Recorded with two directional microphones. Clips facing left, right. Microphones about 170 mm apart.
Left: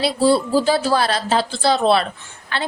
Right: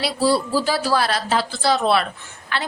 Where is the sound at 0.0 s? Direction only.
25° left (ahead or behind).